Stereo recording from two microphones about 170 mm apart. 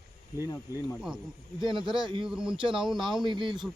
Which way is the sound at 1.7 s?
30° right (ahead or behind).